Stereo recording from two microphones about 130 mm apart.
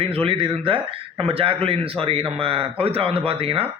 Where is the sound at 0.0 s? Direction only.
45° right (ahead or behind).